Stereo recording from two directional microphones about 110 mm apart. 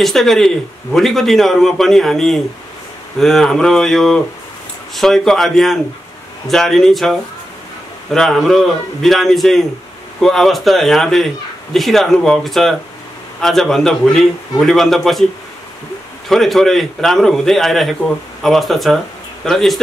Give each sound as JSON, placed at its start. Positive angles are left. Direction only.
{"t": 0.0, "sound": "a man's voice", "side_deg": 5}
{"t": 16.3, "sound": "a man's voice", "side_deg": 0}